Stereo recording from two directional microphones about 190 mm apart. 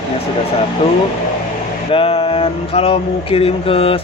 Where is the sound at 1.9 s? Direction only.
30° left (ahead or behind).